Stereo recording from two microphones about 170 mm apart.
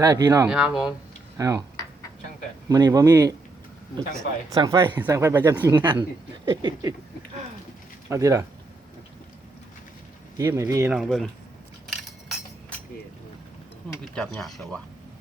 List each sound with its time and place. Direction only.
0.0 s speech: 25° right (ahead or behind)
0.4 s speech: 5° right (ahead or behind)
1.4 s speech: 20° right (ahead or behind)
2.6 s speech: 20° right (ahead or behind)
4.4 s speech: 20° right (ahead or behind)
5.8 s speech: 25° right (ahead or behind)
8.1 s speech: 20° right (ahead or behind)
10.3 s speech: 15° right (ahead or behind)
10.9 s speech: centre (ahead or behind)
11.9 s a sound: centre (ahead or behind)
14.2 s speech: 5° left (ahead or behind)